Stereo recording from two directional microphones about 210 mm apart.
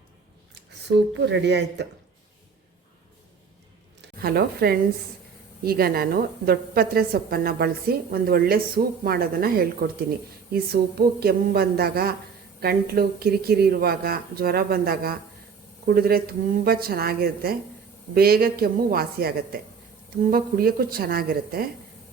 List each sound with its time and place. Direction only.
0.9 s speech: 55° right (ahead or behind)
4.0 s a woman's voice: 45° right (ahead or behind)